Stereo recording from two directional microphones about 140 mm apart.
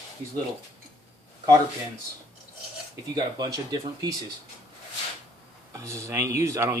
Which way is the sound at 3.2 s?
30° right (ahead or behind).